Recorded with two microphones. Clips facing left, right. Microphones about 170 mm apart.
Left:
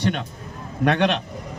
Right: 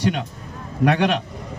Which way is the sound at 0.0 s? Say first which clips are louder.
Right 2 dB; 10° right (ahead or behind).